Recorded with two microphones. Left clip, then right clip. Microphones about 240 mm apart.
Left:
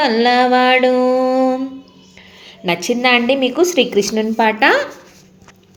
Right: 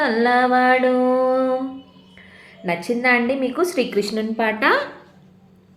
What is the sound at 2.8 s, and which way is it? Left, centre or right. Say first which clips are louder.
Speech: left 4 dB; left.